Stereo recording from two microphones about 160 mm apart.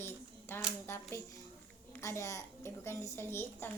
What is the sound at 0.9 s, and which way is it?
A child's voice, 15° left (ahead or behind).